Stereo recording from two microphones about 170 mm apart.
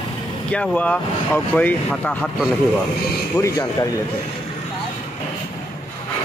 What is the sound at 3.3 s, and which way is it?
Speech, 20° left (ahead or behind).